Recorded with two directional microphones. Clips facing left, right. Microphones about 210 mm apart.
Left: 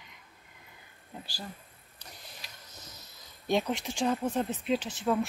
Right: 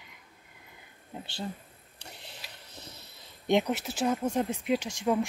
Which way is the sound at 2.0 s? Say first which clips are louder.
Right 3 dB; 30° right (ahead or behind).